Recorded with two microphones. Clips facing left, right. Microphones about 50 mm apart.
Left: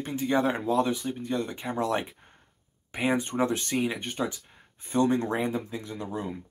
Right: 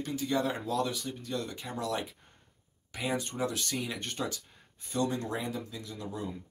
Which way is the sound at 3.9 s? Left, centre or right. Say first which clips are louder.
Left 4 dB; centre.